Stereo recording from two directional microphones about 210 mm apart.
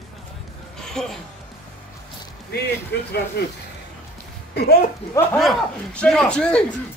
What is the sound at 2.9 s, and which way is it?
Speech, 50° left (ahead or behind).